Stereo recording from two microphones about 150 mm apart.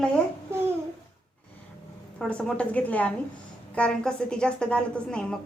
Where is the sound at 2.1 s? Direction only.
5° left (ahead or behind).